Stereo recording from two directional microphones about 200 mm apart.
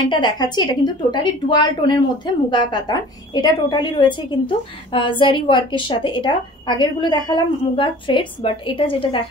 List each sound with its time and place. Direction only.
0.1 s a woman's voice: 20° left (ahead or behind)